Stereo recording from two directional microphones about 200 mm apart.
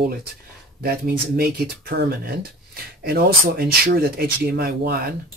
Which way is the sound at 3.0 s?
50° right (ahead or behind).